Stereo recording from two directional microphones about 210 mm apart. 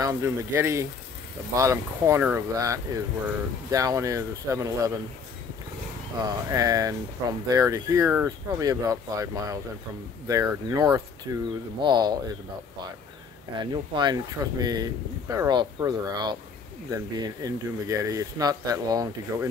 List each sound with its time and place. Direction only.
0.0 s speech: 10° right (ahead or behind)
6.1 s speech: 15° right (ahead or behind)
13.6 s speech: 20° right (ahead or behind)